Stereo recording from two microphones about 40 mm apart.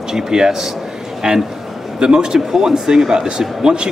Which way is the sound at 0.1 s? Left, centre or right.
Centre.